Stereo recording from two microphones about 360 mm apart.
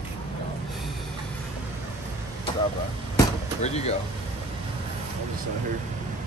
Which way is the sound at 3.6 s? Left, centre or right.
Centre.